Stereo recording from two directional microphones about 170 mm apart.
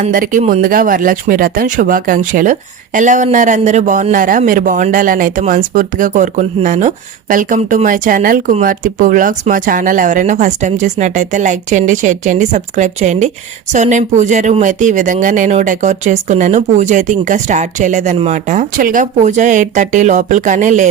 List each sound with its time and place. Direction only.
0.0 s speech: 50° right (ahead or behind)